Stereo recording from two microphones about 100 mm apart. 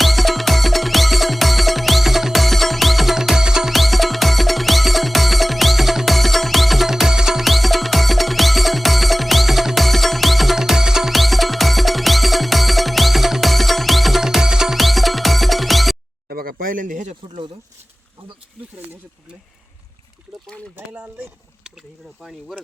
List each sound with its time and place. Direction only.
0.0 s music: centre (ahead or behind)
20.7 s a sound: 20° right (ahead or behind)
22.2 s speech: centre (ahead or behind)